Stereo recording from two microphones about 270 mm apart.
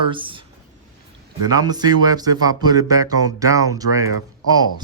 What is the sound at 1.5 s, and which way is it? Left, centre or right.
Speech, centre.